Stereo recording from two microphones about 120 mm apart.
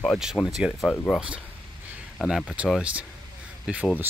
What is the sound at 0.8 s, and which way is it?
Speech, 10° left (ahead or behind).